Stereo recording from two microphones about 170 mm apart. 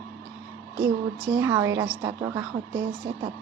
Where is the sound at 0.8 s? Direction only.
15° right (ahead or behind).